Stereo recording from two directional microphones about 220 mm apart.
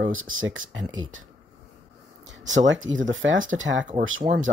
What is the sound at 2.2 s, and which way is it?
Speech, 60° right (ahead or behind).